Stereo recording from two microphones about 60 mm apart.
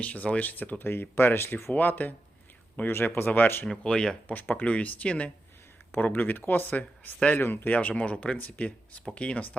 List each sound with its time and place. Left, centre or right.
0.0 s speech: left
1.7 s speech: left
3.7 s speech: centre
4.3 s speech: left